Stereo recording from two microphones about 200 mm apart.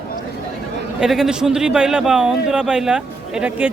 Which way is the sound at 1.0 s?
Centre (ahead or behind).